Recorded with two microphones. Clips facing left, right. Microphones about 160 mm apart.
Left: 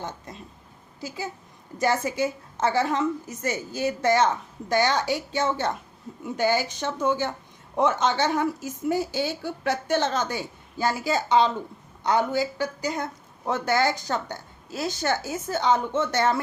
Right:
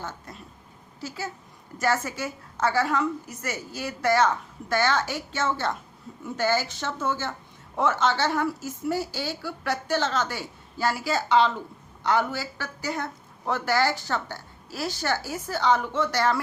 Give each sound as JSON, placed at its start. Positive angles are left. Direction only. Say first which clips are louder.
{"t": 0.3, "sound": "a woman's voice", "louder": "left 2 dB", "side_deg": 20}